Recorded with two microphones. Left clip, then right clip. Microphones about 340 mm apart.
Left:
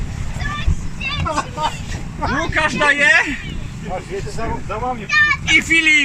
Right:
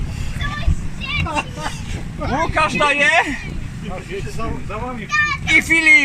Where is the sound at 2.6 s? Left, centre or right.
Centre.